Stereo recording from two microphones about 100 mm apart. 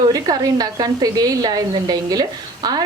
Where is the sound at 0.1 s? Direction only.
40° right (ahead or behind).